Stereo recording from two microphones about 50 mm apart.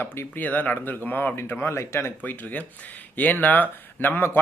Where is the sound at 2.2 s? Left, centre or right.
Left.